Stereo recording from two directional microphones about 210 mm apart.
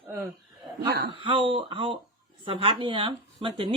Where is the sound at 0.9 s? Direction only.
50° right (ahead or behind).